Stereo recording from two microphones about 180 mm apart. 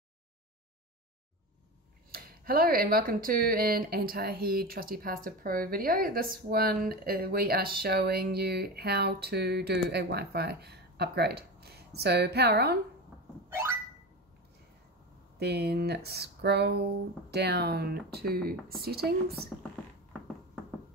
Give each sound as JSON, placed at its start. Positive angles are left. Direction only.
{"t": 2.0, "sound": "speech", "side_deg": -55}
{"t": 13.5, "sound": "a sound", "side_deg": -15}
{"t": 15.3, "sound": "speech", "side_deg": -65}